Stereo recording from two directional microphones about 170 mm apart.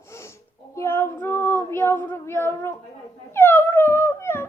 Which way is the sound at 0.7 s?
15° left (ahead or behind).